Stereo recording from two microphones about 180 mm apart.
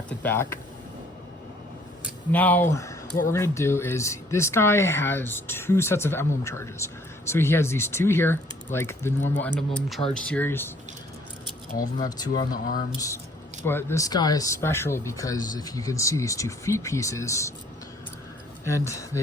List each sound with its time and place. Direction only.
0.1 s speech: 10° left (ahead or behind)
2.3 s speech: 10° left (ahead or behind)
12.0 s speech: 20° left (ahead or behind)
12.5 s speech: 50° left (ahead or behind)
13.7 s speech: 15° left (ahead or behind)